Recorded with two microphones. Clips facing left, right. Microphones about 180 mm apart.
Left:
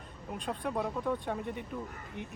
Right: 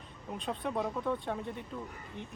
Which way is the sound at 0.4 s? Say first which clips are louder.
Even; 5° left (ahead or behind).